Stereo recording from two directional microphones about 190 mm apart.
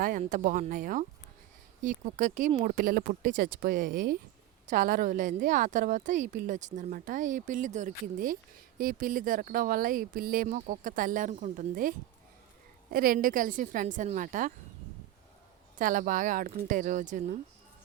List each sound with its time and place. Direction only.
0.0 s a woman's voice: 45° right (ahead or behind)
15.8 s a woman's voice: 45° right (ahead or behind)